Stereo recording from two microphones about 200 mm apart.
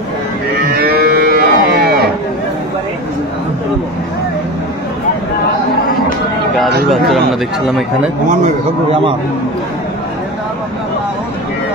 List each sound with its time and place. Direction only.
0.7 s moo: 50° right (ahead or behind)
6.9 s speech: centre (ahead or behind)